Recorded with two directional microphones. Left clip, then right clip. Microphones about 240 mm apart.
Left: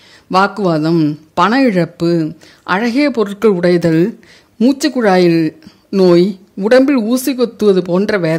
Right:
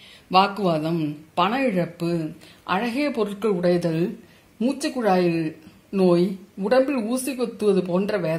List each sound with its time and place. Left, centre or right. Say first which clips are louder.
0.3 s speech: left 6 dB; left